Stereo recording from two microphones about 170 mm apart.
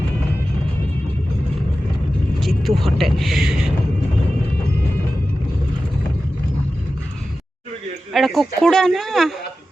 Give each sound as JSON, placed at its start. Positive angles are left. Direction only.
{"t": 2.4, "sound": "vehicle", "side_deg": 0}
{"t": 8.1, "sound": "speech", "side_deg": 0}